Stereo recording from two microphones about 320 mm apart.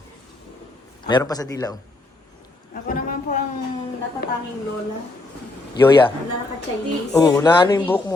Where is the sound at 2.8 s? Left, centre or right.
Left.